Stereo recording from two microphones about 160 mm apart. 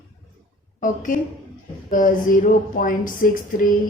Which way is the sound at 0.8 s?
55° left (ahead or behind).